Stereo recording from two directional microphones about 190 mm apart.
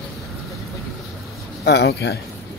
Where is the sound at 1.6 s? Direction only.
60° left (ahead or behind).